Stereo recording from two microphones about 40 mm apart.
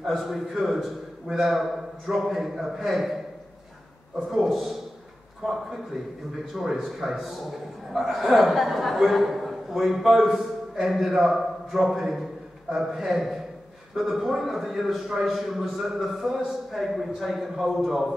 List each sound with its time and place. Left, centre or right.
0.2 s speech: centre
4.3 s speech: centre